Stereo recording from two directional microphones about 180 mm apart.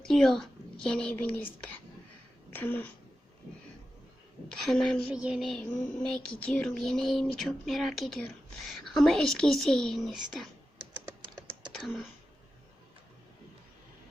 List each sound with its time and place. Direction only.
0.1 s speech: centre (ahead or behind)
4.4 s speech: centre (ahead or behind)
11.3 s typing: 20° right (ahead or behind)
11.7 s a sound: centre (ahead or behind)